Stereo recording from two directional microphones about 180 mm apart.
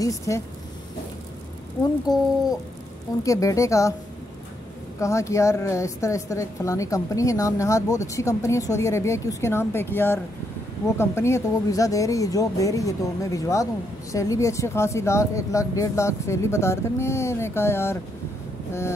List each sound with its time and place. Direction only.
0.3 s a woman's voice: 15° left (ahead or behind)
2.1 s speech: 20° left (ahead or behind)
3.3 s a woman's voice: 20° left (ahead or behind)
5.0 s a woman's voice: 15° left (ahead or behind)